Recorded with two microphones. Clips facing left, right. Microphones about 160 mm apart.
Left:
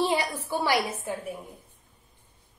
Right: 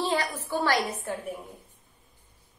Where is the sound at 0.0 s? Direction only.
15° left (ahead or behind).